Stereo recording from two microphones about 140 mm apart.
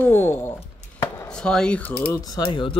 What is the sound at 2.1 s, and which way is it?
Speech, 30° left (ahead or behind).